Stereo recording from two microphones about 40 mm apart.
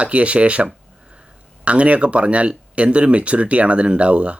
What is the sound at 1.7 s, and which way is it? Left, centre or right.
Speech, right.